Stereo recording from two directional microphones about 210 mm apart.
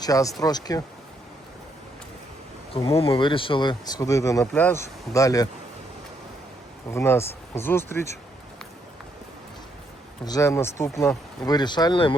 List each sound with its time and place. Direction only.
0.0 s speech: 15° left (ahead or behind)
2.7 s speech: 30° left (ahead or behind)
6.9 s speech: 10° left (ahead or behind)
10.2 s speech: 15° left (ahead or behind)